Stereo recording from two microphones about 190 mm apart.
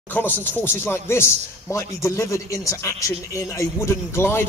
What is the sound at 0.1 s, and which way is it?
A man's voice, 10° left (ahead or behind).